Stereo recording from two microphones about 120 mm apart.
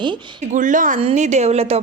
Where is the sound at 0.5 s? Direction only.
90° right.